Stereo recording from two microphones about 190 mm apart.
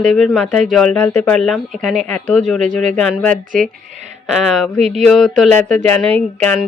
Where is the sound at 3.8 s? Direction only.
35° right (ahead or behind).